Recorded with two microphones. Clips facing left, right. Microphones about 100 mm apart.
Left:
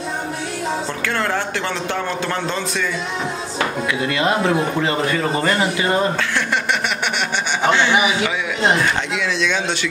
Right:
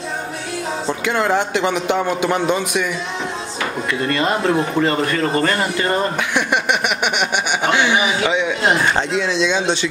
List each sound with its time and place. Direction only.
1.0 s a man's voice: 15° right (ahead or behind)
4.0 s speech: 5° left (ahead or behind)
6.3 s a man's voice: 15° right (ahead or behind)
8.9 s speech: 30° right (ahead or behind)